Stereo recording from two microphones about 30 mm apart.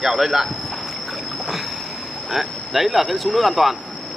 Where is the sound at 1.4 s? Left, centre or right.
Centre.